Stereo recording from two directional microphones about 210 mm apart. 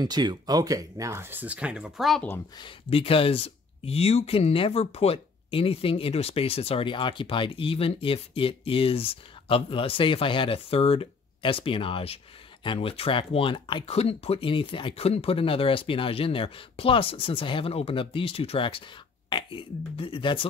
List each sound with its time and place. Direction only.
0.0 s speech: 20° right (ahead or behind); by 2.4 s 5° left (ahead or behind)
2.6 s speech: 25° left (ahead or behind)